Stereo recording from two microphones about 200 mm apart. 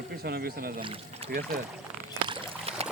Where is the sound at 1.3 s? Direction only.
50° right (ahead or behind).